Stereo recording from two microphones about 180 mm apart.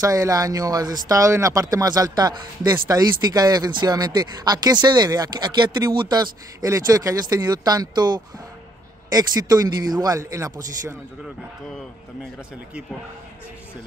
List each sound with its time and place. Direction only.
0.0 s speech: 20° right (ahead or behind)